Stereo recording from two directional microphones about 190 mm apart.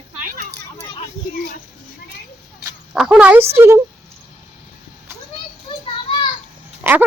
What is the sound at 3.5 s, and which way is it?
Speech, 15° right (ahead or behind).